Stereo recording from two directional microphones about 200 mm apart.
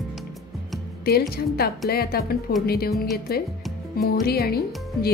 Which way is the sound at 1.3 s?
50° left (ahead or behind).